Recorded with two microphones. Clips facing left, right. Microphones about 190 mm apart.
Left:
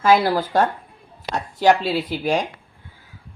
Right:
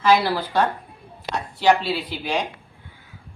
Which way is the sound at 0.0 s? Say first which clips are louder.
Left 2 dB; 45° left (ahead or behind).